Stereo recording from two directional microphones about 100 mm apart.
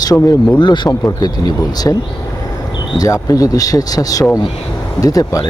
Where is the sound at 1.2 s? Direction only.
40° left (ahead or behind).